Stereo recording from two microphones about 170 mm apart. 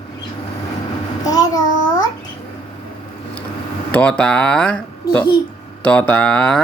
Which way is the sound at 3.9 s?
10° left (ahead or behind).